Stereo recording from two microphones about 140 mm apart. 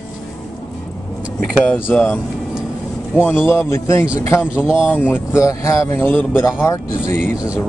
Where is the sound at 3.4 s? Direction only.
15° left (ahead or behind).